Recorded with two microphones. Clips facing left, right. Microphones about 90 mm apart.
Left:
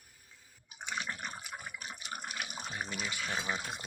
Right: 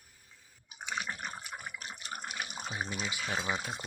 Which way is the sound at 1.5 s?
5° left (ahead or behind).